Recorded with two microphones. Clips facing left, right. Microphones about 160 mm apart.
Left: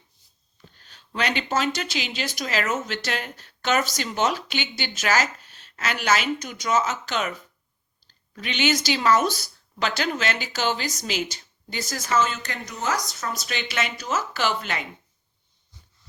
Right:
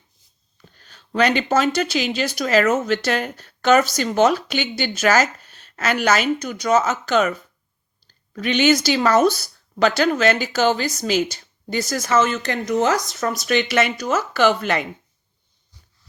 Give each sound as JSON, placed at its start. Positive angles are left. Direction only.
{"t": 1.1, "sound": "speech", "side_deg": -45}
{"t": 8.4, "sound": "speech", "side_deg": -45}
{"t": 11.6, "sound": "a woman's voice", "side_deg": -65}
{"t": 13.7, "sound": "speech", "side_deg": -55}